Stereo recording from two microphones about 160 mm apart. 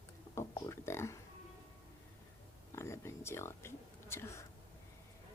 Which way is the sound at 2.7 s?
15° left (ahead or behind).